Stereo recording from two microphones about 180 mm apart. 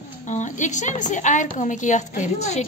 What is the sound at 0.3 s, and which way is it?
A woman's voice, 40° left (ahead or behind).